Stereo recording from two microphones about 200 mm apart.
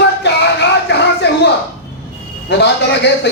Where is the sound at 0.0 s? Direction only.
60° left (ahead or behind).